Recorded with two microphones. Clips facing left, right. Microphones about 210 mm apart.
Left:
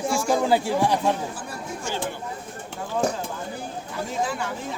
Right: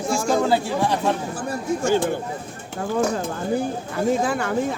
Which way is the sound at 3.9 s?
55° right (ahead or behind).